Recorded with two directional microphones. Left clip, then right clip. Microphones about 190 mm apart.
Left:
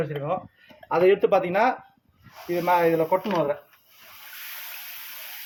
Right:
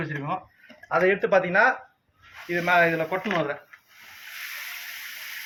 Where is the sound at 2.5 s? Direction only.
60° left (ahead or behind).